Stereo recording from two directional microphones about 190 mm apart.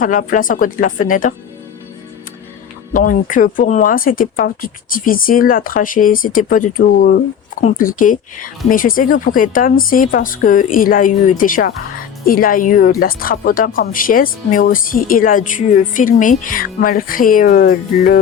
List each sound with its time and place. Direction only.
0.0 s a woman's voice: 45° left (ahead or behind)
2.9 s a woman's voice: 45° left (ahead or behind)